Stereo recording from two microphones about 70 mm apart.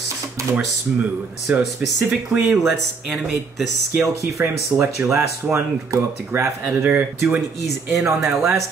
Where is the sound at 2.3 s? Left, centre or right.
Right.